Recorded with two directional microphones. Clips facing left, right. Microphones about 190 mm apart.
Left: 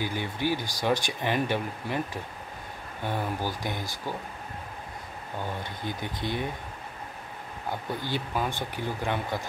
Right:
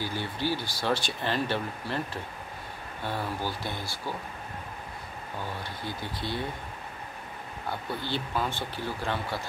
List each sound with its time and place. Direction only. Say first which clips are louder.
0.0 s speech: left 2 dB; 15° left (ahead or behind)
3.0 s speech: left 2 dB; 15° left (ahead or behind)
5.6 s speech: left 2 dB; 20° left (ahead or behind)
8.0 s speech: even; 15° left (ahead or behind)